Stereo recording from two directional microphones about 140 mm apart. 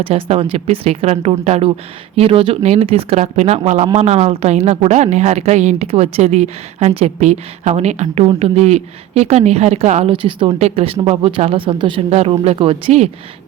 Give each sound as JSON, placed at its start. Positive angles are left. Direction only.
{"t": 0.0, "sound": "a woman's voice", "side_deg": -45}
{"t": 10.1, "sound": "speech", "side_deg": -40}